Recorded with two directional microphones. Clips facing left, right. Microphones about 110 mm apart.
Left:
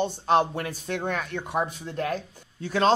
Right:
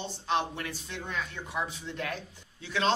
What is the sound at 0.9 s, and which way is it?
A man's voice, 60° left (ahead or behind).